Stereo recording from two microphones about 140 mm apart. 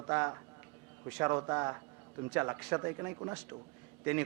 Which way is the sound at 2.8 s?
20° right (ahead or behind).